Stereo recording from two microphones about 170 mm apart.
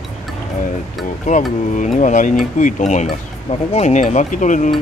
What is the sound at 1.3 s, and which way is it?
Speech, 45° left (ahead or behind).